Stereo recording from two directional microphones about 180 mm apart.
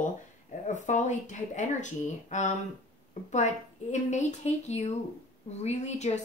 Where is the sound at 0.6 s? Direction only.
40° left (ahead or behind).